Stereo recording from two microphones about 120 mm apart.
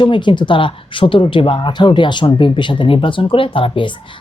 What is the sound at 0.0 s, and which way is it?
Speech, 40° left (ahead or behind).